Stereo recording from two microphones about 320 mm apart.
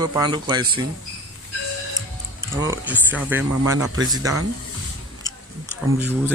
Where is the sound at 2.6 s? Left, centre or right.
Centre.